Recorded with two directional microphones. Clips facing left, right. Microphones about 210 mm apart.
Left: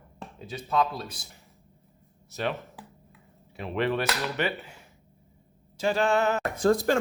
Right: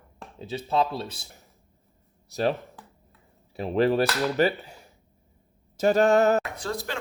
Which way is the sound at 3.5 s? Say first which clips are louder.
Right 5 dB; 35° right (ahead or behind).